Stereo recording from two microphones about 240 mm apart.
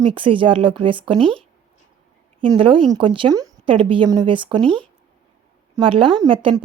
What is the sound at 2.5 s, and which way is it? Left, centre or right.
Speech, right.